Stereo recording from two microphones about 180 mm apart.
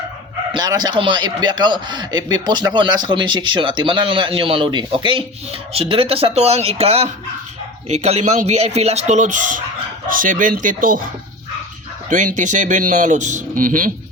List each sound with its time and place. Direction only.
0.5 s a man's voice: 20° right (ahead or behind); by 11.0 s 50° right (ahead or behind)
12.0 s speech: 45° right (ahead or behind)